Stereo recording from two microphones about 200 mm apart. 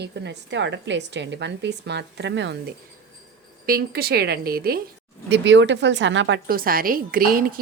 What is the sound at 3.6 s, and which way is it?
Speech, 50° right (ahead or behind).